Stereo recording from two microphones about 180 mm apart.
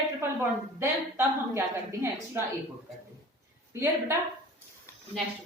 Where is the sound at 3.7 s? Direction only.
15° right (ahead or behind).